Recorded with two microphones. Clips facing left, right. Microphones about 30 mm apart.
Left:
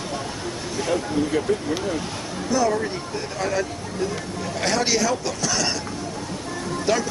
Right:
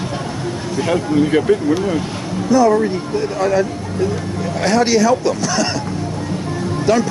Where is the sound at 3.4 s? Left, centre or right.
Centre.